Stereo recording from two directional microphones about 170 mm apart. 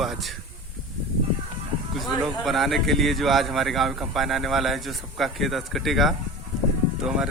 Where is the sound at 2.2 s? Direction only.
Centre (ahead or behind).